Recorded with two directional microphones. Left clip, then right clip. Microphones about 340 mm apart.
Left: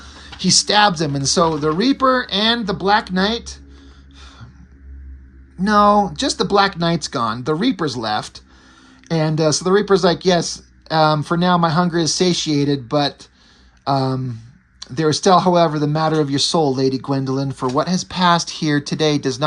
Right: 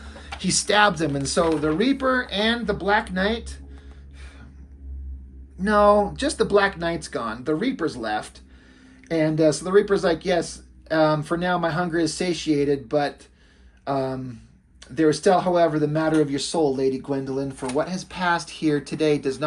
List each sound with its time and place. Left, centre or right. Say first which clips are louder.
0.1 s speech: left 9 dB; left
5.6 s speech: left 4 dB; left
14.8 s speech: left 2 dB; left